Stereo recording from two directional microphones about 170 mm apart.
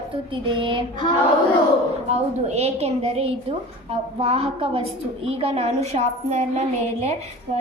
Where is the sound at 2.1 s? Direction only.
40° right (ahead or behind).